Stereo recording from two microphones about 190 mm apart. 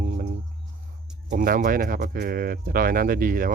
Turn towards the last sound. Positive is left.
turn(degrees=-50)  # may be behind; listen again after turning